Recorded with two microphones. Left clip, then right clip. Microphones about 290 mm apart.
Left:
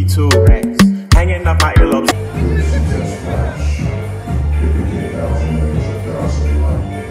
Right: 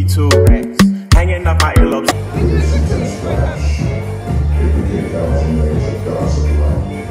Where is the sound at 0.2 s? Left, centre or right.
Centre.